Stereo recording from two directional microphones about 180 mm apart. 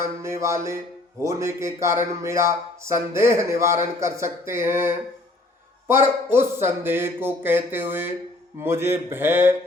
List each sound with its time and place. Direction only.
0.0 s speech: 15° right (ahead or behind)
6.3 s speech: 15° right (ahead or behind)